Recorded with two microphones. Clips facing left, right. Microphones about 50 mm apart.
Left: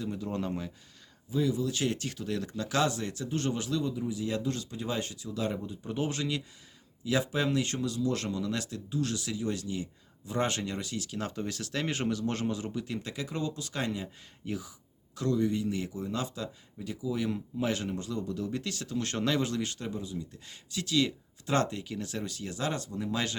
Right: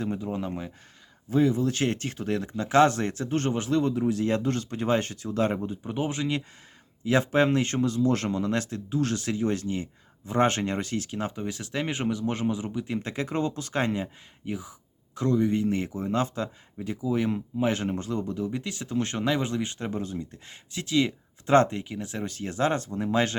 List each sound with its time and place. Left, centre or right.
0.2 s speech: centre
1.3 s speech: right
2.8 s speech: right
3.8 s speech: right
5.8 s speech: right
7.0 s speech: right
11.2 s speech: right
14.4 s speech: centre
14.7 s speech: right
18.3 s speech: right
19.9 s speech: right
22.3 s speech: right